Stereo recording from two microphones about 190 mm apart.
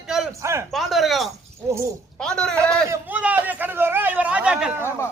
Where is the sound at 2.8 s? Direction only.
10° right (ahead or behind).